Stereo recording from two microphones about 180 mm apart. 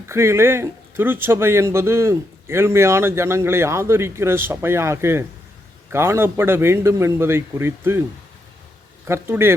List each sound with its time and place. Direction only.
0.1 s speech: 15° right (ahead or behind)
9.0 s speech: 15° right (ahead or behind)